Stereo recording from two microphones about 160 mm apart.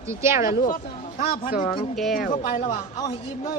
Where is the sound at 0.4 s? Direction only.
60° left (ahead or behind).